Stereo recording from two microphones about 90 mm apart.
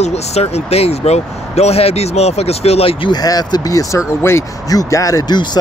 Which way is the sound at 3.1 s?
45° left (ahead or behind).